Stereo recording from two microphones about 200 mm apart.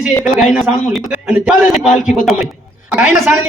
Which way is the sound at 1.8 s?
40° left (ahead or behind).